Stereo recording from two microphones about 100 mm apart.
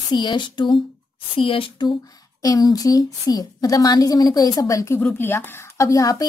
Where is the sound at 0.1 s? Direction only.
45° left (ahead or behind).